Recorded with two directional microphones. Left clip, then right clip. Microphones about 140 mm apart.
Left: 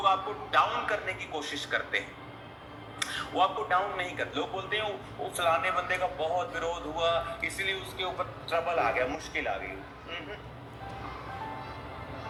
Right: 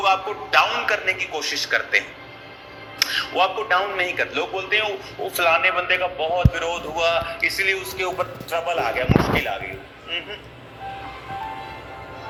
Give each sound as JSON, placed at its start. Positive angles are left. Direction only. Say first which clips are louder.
{"t": 0.0, "sound": "a man's voice", "louder": "right 7 dB", "side_deg": -10}
{"t": 3.1, "sound": "a man's voice", "louder": "right 6 dB", "side_deg": -10}